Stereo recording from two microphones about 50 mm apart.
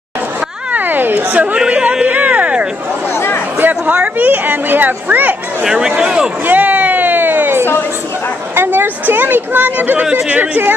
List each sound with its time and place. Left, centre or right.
0.7 s a sound: right
1.7 s music: right
2.0 s speech: right
3.1 s chatter: left
3.5 s speech: right
5.6 s speech: centre
6.4 s a sound: right
8.5 s speech: right